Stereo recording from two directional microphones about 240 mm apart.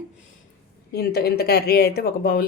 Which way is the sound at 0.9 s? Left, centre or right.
Left.